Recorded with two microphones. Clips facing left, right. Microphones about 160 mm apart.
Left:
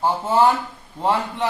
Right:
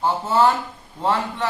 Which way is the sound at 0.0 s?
15° left (ahead or behind).